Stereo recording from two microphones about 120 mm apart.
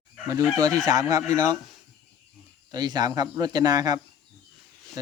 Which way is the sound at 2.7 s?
35° right (ahead or behind).